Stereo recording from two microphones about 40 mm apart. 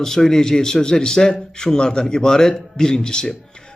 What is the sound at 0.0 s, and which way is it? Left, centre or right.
A man's voice, centre.